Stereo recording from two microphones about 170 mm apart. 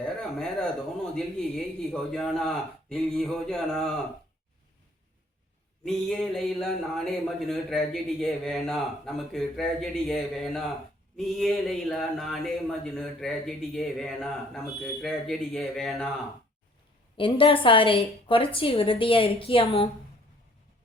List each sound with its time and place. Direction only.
0.0 s speech: centre (ahead or behind)
5.8 s speech: centre (ahead or behind)
17.2 s a woman's voice: 30° left (ahead or behind)